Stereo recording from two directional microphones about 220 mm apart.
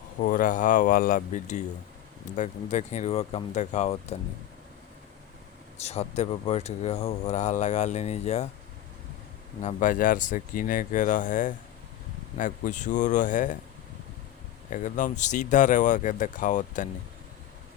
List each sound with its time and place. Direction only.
0.2 s speech: 40° left (ahead or behind)
5.7 s speech: 30° left (ahead or behind)
9.6 s speech: 35° left (ahead or behind)
14.7 s speech: 35° left (ahead or behind)